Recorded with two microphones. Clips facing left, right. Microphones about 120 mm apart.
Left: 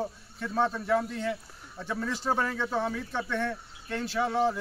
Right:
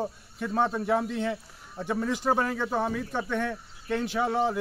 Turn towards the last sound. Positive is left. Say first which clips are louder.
# right 1 dB
turn(degrees=-15)  # may be behind; listen again after turning